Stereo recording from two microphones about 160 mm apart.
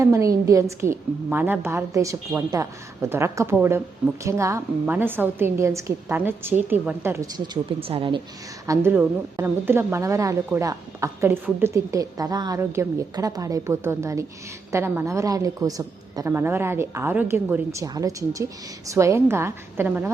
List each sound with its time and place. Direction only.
0.0 s a woman's voice: 20° right (ahead or behind); by 8.2 s 35° right (ahead or behind)
8.6 s a woman's voice: 20° right (ahead or behind)